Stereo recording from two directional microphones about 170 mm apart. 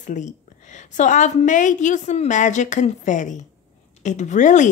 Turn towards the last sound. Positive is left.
turn(degrees=45)  # may be behind; listen again after turning